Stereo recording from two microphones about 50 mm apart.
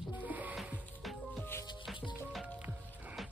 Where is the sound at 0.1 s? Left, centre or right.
Right.